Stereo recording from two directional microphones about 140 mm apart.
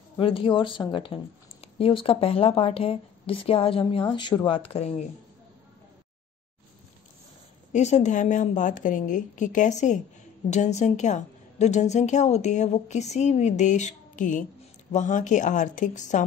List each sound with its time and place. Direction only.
0.2 s speech: 40° left (ahead or behind)
7.7 s a woman's voice: 55° left (ahead or behind)